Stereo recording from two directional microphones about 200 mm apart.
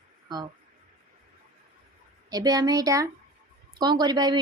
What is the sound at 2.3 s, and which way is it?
Speech, 20° right (ahead or behind).